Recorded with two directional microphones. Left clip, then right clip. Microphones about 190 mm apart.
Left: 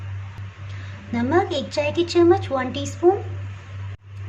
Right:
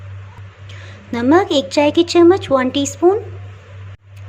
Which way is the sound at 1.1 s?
45° right (ahead or behind).